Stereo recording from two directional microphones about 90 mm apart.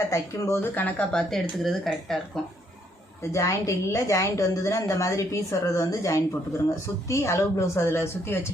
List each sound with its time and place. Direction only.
0.1 s a woman's voice: 35° left (ahead or behind)
0.9 s speech: 15° left (ahead or behind)
1.3 s speech: centre (ahead or behind)
3.3 s a woman's voice: 35° left (ahead or behind)